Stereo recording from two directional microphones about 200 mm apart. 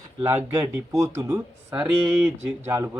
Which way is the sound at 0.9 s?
15° right (ahead or behind).